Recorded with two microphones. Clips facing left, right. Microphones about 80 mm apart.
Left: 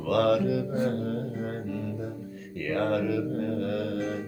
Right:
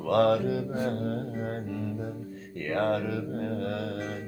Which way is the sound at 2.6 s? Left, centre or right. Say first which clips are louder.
Left 1 dB; right.